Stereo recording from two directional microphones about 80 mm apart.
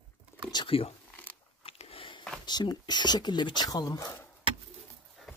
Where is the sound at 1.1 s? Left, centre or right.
Left.